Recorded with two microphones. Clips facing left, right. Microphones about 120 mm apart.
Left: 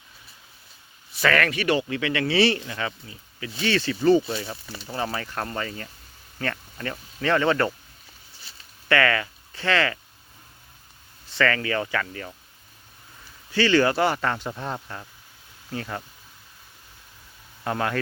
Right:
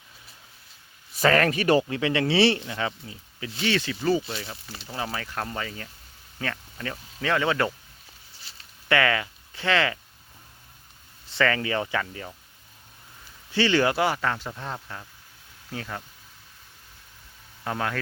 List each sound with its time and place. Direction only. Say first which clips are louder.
1.2 s speech: right 2 dB; 35° right (ahead or behind); by 7.7 s 10° right (ahead or behind)
8.9 s speech: left 1 dB; 15° right (ahead or behind)
11.3 s speech: left 1 dB; 20° right (ahead or behind)
13.5 s speech: left 2 dB; 20° right (ahead or behind); by 16.0 s centre (ahead or behind)
17.6 s speech: left 3 dB; centre (ahead or behind)